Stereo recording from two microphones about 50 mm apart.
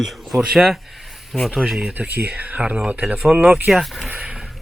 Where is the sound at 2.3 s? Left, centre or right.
Right.